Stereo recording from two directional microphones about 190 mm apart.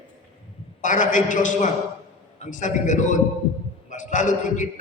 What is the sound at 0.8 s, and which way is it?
A man's voice, 40° left (ahead or behind).